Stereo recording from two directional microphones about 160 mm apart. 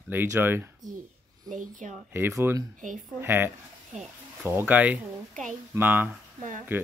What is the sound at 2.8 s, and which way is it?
Speech, 55° right (ahead or behind).